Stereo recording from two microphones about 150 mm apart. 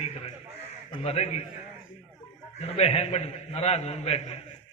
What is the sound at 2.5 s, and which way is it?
A man's voice, 45° left (ahead or behind).